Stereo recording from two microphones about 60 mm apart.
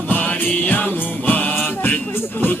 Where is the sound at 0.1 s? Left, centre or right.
Left.